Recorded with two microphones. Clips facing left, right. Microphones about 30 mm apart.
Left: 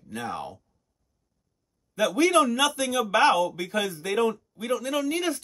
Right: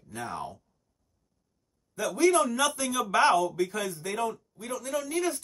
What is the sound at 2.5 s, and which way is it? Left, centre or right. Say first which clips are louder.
A man's voice: left 3 dB; centre.